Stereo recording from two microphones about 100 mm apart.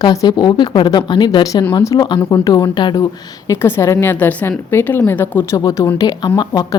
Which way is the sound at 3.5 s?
25° left (ahead or behind).